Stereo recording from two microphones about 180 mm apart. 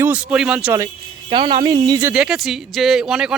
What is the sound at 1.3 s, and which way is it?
Speech, 25° right (ahead or behind).